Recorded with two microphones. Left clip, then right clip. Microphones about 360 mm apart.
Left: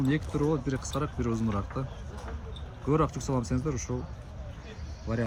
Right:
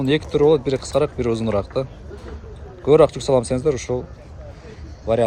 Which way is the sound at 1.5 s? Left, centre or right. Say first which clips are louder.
Right 14 dB; right.